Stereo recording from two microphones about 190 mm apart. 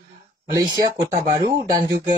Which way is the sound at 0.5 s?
20° right (ahead or behind).